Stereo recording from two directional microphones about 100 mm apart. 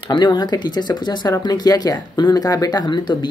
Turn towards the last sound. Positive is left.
turn(degrees=50)  # may be behind; listen again after turning